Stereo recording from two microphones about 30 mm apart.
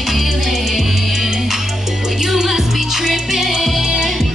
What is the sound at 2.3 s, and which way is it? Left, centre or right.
Music, centre.